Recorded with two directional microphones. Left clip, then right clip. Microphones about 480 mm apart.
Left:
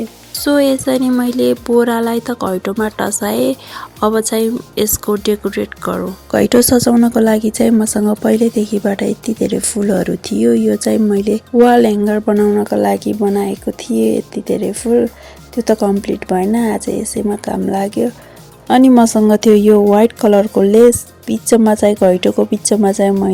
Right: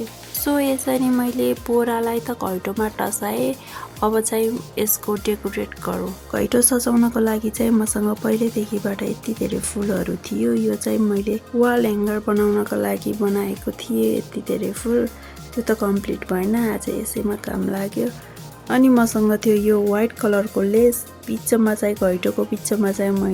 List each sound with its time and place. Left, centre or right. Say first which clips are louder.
0.3 s speech: left 8 dB; right